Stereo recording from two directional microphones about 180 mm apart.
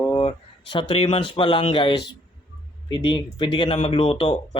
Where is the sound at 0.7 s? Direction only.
30° left (ahead or behind).